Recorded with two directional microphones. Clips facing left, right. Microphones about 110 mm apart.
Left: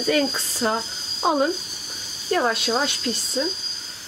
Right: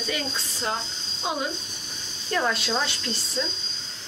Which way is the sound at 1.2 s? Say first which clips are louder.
Left 9 dB; 45° left (ahead or behind).